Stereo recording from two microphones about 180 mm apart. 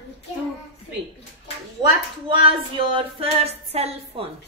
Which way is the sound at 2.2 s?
30° right (ahead or behind).